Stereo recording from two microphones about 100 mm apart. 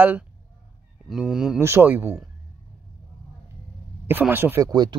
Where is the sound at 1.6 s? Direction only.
20° right (ahead or behind).